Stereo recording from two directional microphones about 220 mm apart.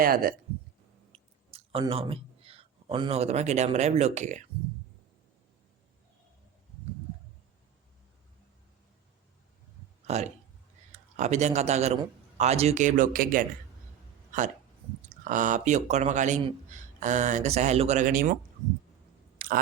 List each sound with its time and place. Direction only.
0.0 s speech: 40° right (ahead or behind)
1.1 s speech: 25° right (ahead or behind)
10.9 s a man's voice: 30° right (ahead or behind)
15.1 s speech: 35° right (ahead or behind)
19.4 s chewing: 40° right (ahead or behind)